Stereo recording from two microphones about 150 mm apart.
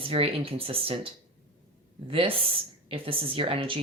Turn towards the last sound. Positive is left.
turn(degrees=-35)  # may be behind; listen again after turning